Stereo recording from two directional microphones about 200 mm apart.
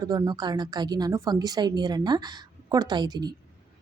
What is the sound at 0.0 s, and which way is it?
A woman's voice, 20° right (ahead or behind).